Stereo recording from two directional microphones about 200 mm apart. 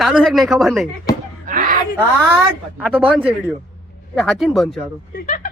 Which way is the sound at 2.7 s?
5° right (ahead or behind).